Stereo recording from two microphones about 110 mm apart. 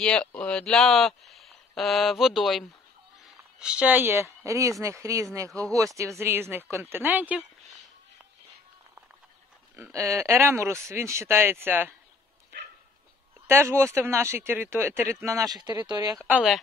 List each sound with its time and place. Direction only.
0.0 s speech: 5° left (ahead or behind); by 7.4 s 15° right (ahead or behind)
9.9 s speech: 25° right (ahead or behind)
13.5 s speech: 25° right (ahead or behind)